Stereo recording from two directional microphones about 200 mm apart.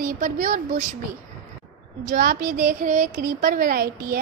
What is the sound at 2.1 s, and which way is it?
Speech, 45° right (ahead or behind).